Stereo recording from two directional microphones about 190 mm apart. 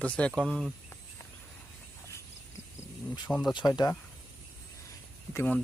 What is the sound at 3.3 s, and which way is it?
Speech, 5° left (ahead or behind).